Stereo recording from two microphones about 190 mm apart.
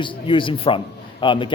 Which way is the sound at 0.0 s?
25° left (ahead or behind).